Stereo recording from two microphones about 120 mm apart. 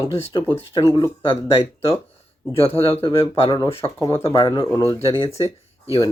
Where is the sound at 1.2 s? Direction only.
45° left (ahead or behind).